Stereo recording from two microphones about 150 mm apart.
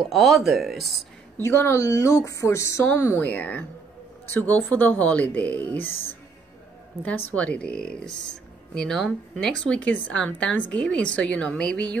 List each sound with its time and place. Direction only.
0.1 s speech: centre (ahead or behind)
1.4 s speech: 20° left (ahead or behind)
7.1 s speech: 10° left (ahead or behind)